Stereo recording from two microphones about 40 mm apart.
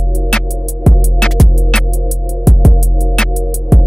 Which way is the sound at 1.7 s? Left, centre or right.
Centre.